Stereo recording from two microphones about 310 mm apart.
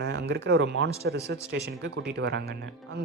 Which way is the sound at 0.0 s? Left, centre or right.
Right.